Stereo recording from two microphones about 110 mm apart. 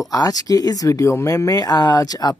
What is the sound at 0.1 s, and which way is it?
Speech, 35° left (ahead or behind).